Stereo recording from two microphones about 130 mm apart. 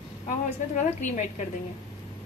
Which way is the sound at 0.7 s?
65° left (ahead or behind).